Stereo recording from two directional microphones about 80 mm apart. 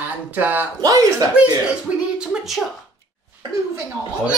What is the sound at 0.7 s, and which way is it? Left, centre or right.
Speech, right.